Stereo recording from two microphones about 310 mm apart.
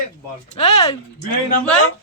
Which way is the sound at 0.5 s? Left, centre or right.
Left.